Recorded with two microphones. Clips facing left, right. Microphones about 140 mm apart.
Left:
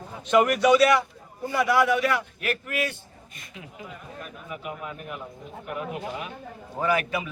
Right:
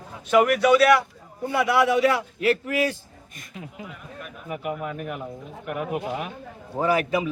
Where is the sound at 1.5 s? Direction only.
25° right (ahead or behind).